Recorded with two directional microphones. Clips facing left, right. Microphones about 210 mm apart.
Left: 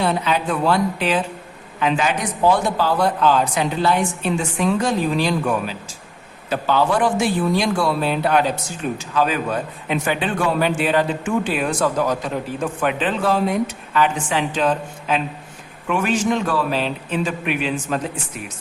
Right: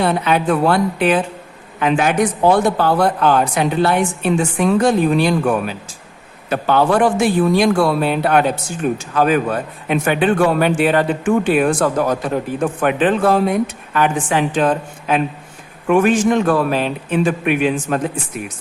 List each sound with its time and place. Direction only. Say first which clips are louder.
0.0 s a man's voice: right 4 dB; 55° right (ahead or behind)